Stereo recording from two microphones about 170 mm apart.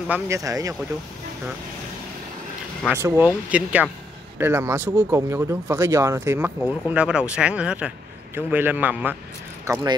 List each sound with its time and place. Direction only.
0.1 s speech: 20° right (ahead or behind)
2.9 s speech: 10° right (ahead or behind)